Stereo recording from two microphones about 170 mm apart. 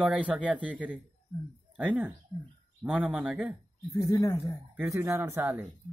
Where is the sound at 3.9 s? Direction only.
15° left (ahead or behind).